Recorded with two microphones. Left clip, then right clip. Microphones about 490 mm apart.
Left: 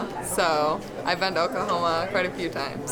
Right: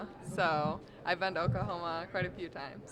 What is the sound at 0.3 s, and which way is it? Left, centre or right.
Speech, right.